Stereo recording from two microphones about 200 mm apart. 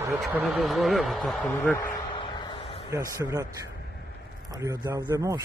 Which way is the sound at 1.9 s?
20° left (ahead or behind).